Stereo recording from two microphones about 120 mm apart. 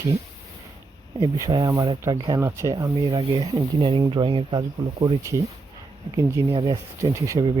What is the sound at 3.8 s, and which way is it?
Speech, 45° right (ahead or behind).